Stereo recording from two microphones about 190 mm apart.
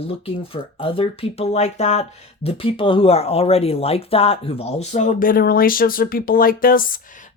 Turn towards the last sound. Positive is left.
turn(degrees=50)  # may be behind; listen again after turning